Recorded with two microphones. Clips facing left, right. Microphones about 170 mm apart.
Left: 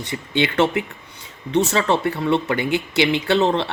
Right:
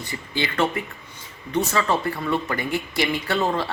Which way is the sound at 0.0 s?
75° left (ahead or behind).